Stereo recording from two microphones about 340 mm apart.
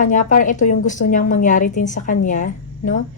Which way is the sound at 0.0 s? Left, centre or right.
Left.